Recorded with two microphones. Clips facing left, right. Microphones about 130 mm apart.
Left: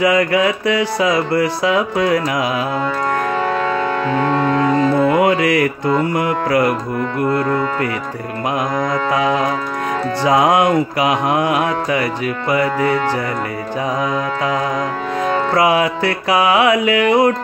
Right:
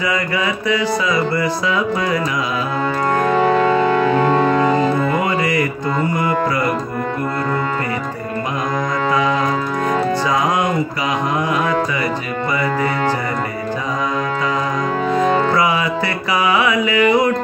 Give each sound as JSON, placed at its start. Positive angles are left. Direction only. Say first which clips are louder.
{"t": 0.0, "sound": "music", "louder": "left 6 dB", "side_deg": 70}
{"t": 3.3, "sound": "music", "louder": "right 4 dB", "side_deg": -10}
{"t": 5.1, "sound": "music", "louder": "left 4 dB", "side_deg": 85}
{"t": 9.1, "sound": "music", "louder": "left 1 dB", "side_deg": 65}
{"t": 10.2, "sound": "mantra", "louder": "left 4 dB", "side_deg": 75}
{"t": 15.5, "sound": "music", "louder": "left 3 dB", "side_deg": 65}